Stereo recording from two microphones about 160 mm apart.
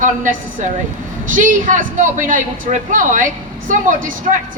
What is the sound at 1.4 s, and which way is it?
A woman's voice, 55° right (ahead or behind).